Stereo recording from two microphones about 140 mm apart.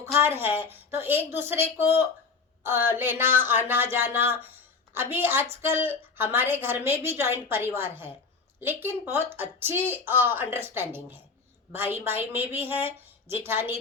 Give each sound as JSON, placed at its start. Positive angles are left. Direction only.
{"t": 0.0, "sound": "a woman's voice", "side_deg": -20}